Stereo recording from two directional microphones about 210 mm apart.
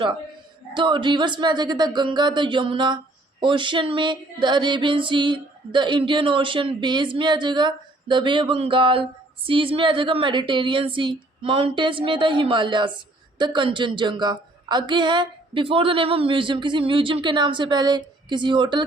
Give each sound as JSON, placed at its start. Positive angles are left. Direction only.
{"t": 0.7, "sound": "female singing", "side_deg": -25}